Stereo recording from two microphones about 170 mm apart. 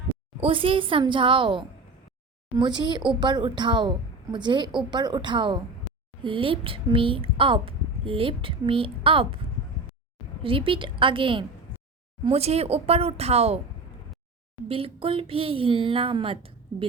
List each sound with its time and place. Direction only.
0.3 s a woman's voice: 35° right (ahead or behind)
10.4 s a woman's voice: 30° right (ahead or behind)
14.7 s speech: 35° right (ahead or behind)